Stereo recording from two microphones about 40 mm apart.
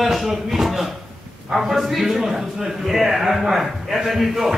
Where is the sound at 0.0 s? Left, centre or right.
Centre.